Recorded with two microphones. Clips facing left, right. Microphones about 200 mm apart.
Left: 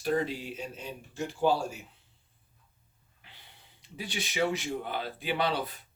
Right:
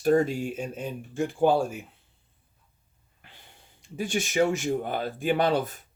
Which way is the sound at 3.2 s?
50° right (ahead or behind).